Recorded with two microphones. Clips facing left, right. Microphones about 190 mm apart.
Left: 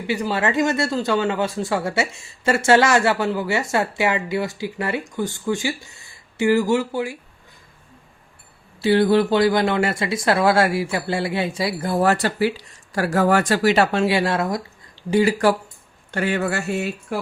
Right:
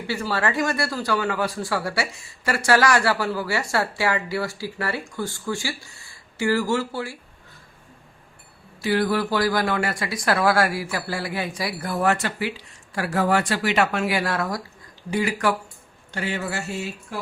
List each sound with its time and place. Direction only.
0.1 s speech: 20° left (ahead or behind)
8.8 s speech: 25° left (ahead or behind)
16.1 s mantra: 55° left (ahead or behind)